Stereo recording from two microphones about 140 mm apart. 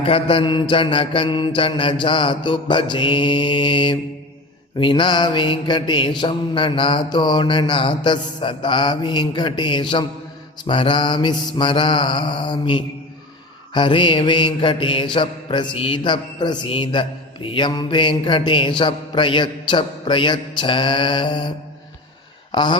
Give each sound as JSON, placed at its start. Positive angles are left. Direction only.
{"t": 0.0, "sound": "mantra", "side_deg": 40}
{"t": 22.5, "sound": "mantra", "side_deg": 35}